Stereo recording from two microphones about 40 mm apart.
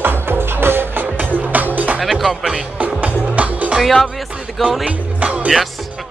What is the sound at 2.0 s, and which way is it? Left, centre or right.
Speech, centre.